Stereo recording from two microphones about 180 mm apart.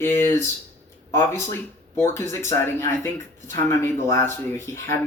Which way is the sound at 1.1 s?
15° left (ahead or behind).